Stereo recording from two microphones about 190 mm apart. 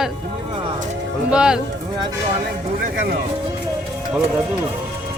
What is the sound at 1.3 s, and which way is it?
Speech, 5° right (ahead or behind).